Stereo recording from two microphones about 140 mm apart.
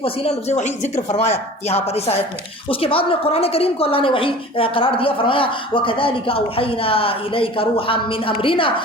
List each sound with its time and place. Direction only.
0.0 s a woman's voice: 45° left (ahead or behind)